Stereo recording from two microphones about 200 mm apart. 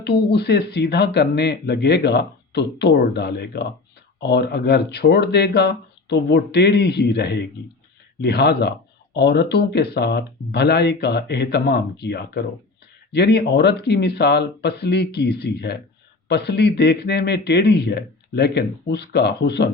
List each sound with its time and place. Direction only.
0.0 s speech: 55° left (ahead or behind)